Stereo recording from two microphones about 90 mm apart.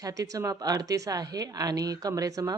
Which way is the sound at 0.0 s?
40° right (ahead or behind).